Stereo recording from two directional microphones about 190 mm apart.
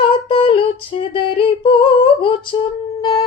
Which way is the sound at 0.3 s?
30° left (ahead or behind).